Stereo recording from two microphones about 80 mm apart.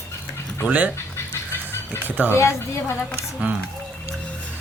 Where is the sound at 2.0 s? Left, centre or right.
Right.